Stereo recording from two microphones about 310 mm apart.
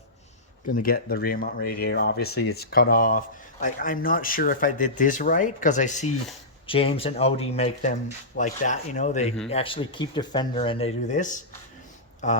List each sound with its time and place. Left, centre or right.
0.7 s speech: left